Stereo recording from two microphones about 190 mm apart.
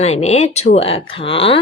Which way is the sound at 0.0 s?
35° left (ahead or behind).